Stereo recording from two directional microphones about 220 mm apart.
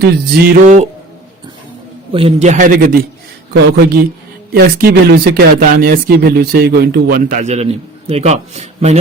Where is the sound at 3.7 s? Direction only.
50° right (ahead or behind).